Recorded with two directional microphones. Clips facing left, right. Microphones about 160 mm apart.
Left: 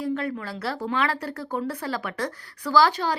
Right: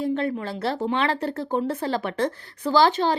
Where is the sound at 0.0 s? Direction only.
25° right (ahead or behind).